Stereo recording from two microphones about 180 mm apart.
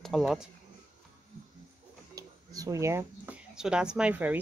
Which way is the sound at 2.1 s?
20° right (ahead or behind).